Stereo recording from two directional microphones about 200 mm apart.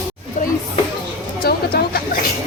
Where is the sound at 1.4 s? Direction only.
50° left (ahead or behind).